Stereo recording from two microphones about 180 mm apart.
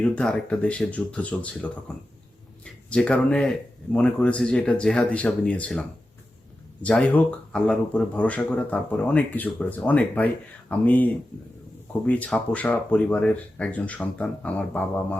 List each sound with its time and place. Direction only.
0.0 s speech: 5° left (ahead or behind)
6.8 s speech: 5° left (ahead or behind)